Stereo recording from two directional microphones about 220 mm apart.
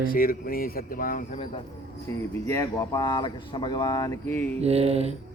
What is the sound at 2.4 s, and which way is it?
Speech, 10° left (ahead or behind).